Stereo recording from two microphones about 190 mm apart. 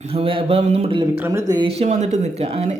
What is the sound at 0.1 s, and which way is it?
Speech, 30° right (ahead or behind).